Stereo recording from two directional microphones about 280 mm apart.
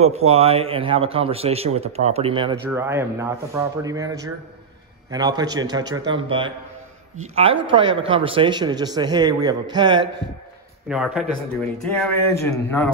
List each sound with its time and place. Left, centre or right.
0.0 s a man's voice: right
10.9 s speech: centre